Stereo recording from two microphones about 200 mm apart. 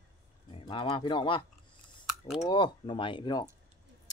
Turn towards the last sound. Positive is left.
turn(degrees=25)  # may be behind; listen again after turning